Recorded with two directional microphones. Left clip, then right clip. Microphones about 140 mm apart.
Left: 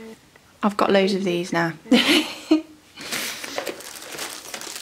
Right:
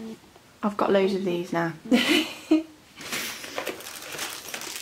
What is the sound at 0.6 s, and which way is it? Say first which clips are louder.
Speech: left 4 dB; 35° left (ahead or behind).